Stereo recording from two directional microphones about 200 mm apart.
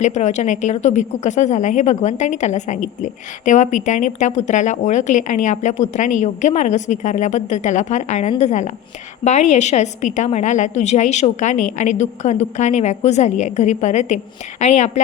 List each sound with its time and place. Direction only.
0.0 s speech: 35° left (ahead or behind)